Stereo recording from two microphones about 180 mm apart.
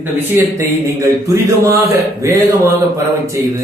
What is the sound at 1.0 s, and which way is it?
A man's voice, 15° right (ahead or behind).